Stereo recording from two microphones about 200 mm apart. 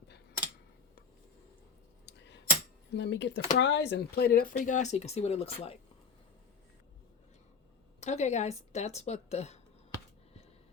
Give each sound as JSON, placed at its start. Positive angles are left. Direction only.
{"t": 2.0, "sound": "a sound", "side_deg": 60}
{"t": 2.9, "sound": "speech", "side_deg": 60}
{"t": 8.0, "sound": "a woman's voice", "side_deg": 35}